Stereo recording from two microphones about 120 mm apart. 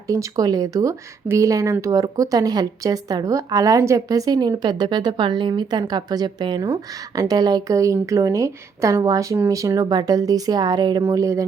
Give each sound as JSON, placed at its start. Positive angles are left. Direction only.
{"t": 0.1, "sound": "speech", "side_deg": -30}